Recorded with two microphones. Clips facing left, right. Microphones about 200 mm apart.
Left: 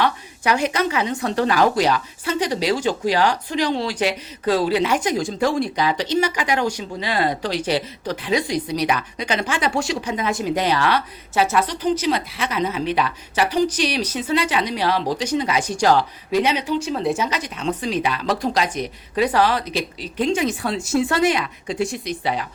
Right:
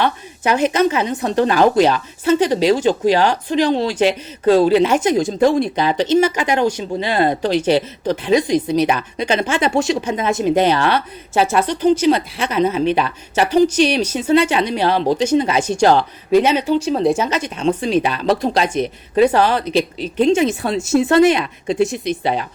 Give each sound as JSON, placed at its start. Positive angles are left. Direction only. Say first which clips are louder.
{"t": 0.0, "sound": "a woman's voice", "louder": "right 2 dB", "side_deg": -25}
{"t": 16.3, "sound": "speech", "louder": "right 6 dB", "side_deg": -50}
{"t": 17.7, "sound": "a woman's voice", "louder": "right 6 dB", "side_deg": -25}